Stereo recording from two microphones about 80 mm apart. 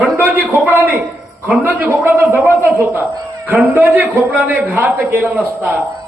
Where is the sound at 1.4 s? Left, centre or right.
Right.